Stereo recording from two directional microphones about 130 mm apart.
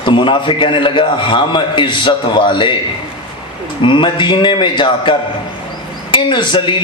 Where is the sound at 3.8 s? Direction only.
40° left (ahead or behind).